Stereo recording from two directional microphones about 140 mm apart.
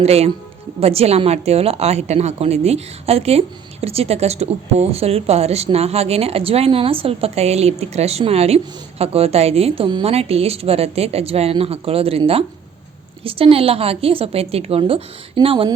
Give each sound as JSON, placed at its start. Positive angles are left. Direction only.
{"t": 0.0, "sound": "a woman's voice", "side_deg": -45}